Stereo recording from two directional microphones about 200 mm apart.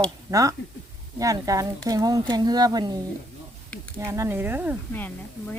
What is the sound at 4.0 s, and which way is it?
Speech, 15° right (ahead or behind).